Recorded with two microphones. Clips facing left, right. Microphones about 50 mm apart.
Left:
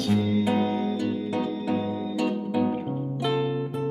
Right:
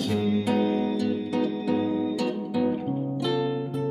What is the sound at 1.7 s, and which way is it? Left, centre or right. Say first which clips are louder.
Music: right 2 dB; centre.